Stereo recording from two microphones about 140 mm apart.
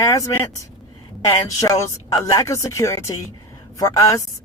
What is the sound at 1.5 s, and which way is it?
Speech, 25° left (ahead or behind).